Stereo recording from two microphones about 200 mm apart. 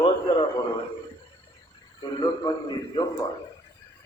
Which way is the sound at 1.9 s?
20° left (ahead or behind).